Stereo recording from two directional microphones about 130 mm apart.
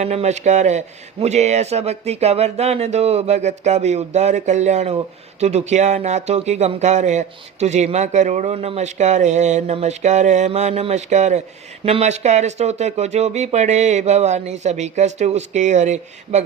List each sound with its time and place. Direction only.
0.0 s speech: 55° right (ahead or behind)